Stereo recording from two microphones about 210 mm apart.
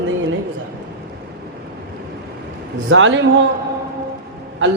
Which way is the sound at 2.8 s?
65° right (ahead or behind).